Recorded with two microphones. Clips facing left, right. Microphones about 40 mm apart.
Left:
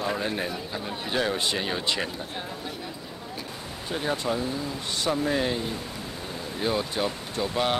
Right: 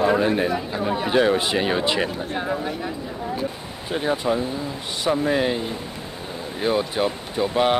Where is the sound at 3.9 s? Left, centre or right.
Centre.